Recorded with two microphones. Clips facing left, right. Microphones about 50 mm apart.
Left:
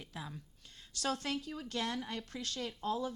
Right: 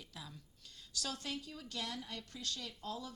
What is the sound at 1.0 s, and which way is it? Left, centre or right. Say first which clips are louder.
A woman's voice: left 6 dB; left.